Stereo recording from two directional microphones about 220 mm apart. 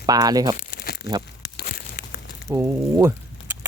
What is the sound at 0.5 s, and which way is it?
Crumpling, 40° left (ahead or behind).